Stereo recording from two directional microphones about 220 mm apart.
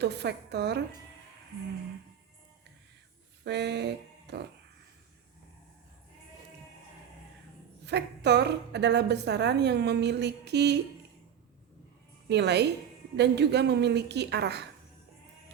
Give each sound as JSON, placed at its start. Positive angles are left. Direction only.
{"t": 0.0, "sound": "a woman's voice", "side_deg": -50}
{"t": 3.4, "sound": "music", "side_deg": -50}
{"t": 7.9, "sound": "a woman's voice", "side_deg": -50}
{"t": 12.3, "sound": "a woman's voice", "side_deg": -50}